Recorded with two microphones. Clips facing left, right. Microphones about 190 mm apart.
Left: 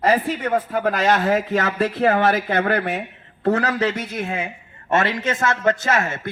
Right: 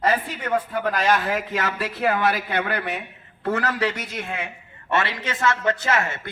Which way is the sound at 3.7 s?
20° left (ahead or behind).